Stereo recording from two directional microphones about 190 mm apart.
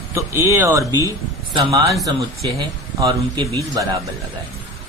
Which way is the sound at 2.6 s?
25° right (ahead or behind).